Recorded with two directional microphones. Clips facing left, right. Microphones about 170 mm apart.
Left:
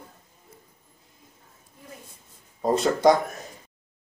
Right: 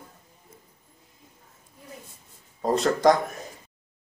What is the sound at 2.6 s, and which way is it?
Speech, centre (ahead or behind).